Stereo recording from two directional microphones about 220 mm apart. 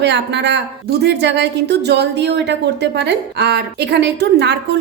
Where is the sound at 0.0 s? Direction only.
50° right (ahead or behind).